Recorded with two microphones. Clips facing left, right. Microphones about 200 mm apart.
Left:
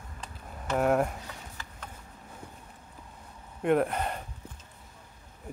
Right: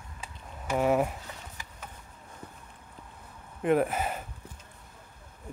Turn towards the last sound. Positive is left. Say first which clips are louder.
# even
turn(degrees=-5)  # may be behind; listen again after turning